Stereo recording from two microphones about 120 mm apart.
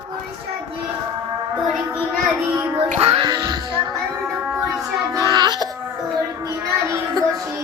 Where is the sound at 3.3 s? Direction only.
35° right (ahead or behind).